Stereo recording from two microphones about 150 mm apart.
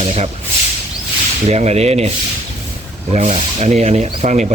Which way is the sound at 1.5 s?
45° right (ahead or behind).